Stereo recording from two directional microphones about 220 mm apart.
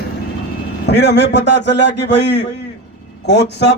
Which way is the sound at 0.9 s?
50° left (ahead or behind).